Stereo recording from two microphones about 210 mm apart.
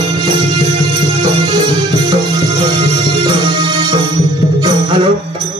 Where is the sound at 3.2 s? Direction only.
20° right (ahead or behind).